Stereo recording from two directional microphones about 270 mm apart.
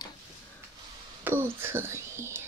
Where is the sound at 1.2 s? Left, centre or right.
Centre.